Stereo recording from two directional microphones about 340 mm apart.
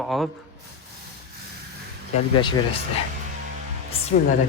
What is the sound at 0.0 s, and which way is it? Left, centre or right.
Speech, centre.